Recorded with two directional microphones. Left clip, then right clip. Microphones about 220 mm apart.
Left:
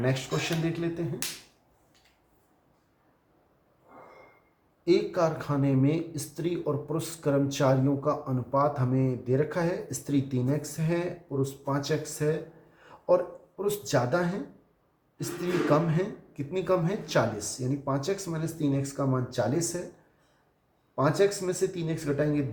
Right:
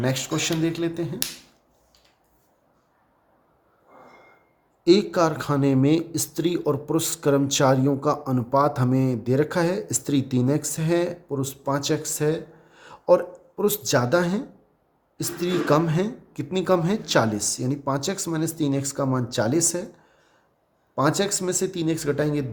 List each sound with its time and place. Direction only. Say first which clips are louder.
0.0 s speech: right 4 dB; 50° right (ahead or behind)
4.8 s speech: right 6 dB; 50° right (ahead or behind)
20.9 s speech: right 2 dB; 50° right (ahead or behind)